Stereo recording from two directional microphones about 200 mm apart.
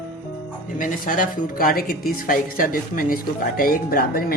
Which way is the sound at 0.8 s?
45° left (ahead or behind).